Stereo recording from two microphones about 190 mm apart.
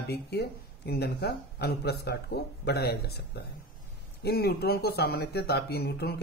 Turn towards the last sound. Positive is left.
turn(degrees=60)  # may be behind; listen again after turning